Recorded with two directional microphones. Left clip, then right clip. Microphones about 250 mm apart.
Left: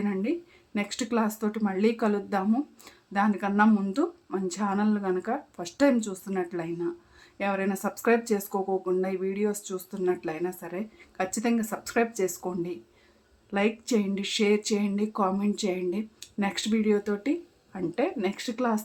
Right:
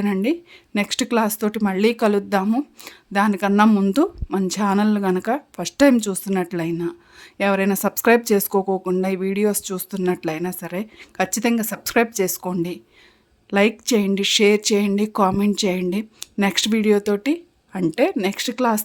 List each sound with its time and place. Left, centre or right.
0.0 s speech: right